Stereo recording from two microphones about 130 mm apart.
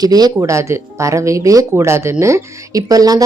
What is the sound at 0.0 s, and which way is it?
Speech, 30° right (ahead or behind).